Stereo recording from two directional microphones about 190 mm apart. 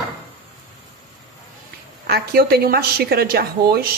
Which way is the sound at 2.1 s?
55° right (ahead or behind).